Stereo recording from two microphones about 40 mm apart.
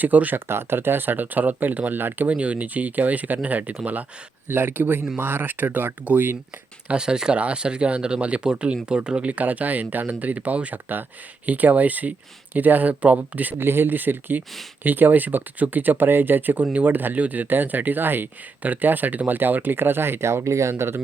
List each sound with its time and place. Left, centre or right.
0.0 s speech: right
0.3 s speech: right
2.0 s speech: right
2.3 s speech: right
4.4 s speech: right
7.0 s speech: centre
7.3 s speech: right
13.6 s speech: right
18.6 s speech: right
20.7 s speech: right